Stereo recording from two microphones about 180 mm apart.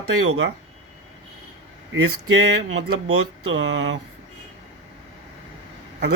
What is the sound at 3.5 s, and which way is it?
Speech, 90° right.